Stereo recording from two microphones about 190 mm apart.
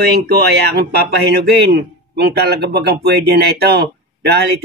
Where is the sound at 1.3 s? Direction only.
60° right (ahead or behind).